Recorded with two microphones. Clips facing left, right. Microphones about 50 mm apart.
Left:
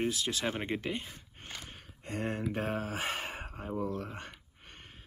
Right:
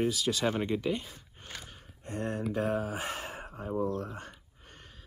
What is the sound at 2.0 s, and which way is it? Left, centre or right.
Speech, left.